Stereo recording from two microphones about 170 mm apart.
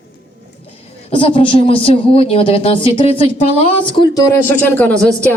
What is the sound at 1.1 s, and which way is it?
Speech, 30° left (ahead or behind).